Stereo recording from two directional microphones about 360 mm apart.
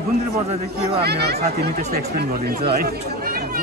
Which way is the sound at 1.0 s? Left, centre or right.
Right.